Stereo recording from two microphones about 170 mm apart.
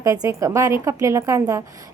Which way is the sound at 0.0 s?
20° right (ahead or behind).